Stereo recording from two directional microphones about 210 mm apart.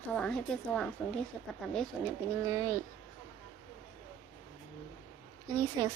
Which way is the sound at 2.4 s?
15° right (ahead or behind).